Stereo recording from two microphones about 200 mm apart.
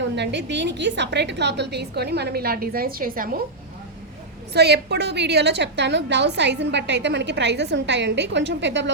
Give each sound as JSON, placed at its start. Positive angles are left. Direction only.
{"t": 0.2, "sound": "a woman's voice", "side_deg": -60}
{"t": 4.5, "sound": "a woman's voice", "side_deg": -55}